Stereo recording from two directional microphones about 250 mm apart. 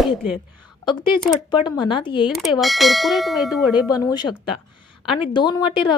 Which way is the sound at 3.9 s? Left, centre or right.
Centre.